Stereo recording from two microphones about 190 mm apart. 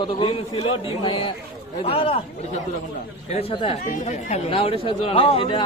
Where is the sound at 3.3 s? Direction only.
30° left (ahead or behind).